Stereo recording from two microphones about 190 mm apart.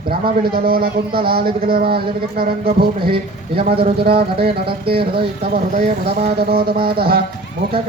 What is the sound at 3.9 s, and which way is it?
Speech, 55° right (ahead or behind).